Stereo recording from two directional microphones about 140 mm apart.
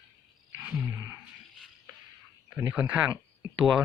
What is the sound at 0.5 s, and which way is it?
Roaring cats, 15° right (ahead or behind).